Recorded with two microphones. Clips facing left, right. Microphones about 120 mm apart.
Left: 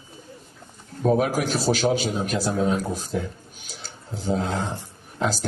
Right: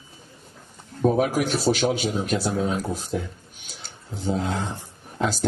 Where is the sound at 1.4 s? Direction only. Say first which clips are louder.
Right 1 dB; 35° left (ahead or behind).